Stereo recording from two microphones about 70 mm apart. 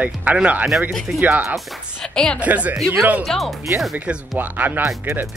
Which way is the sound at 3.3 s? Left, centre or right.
Centre.